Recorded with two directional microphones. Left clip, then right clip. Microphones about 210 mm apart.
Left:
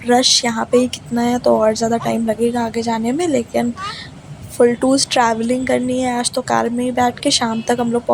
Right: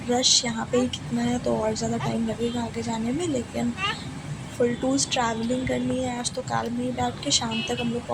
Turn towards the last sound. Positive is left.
turn(degrees=35)  # may be behind; listen again after turning